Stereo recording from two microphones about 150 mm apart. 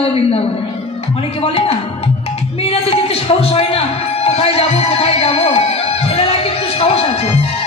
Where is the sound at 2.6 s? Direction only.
40° left (ahead or behind).